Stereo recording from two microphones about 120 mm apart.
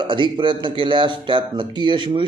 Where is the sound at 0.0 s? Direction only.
40° right (ahead or behind).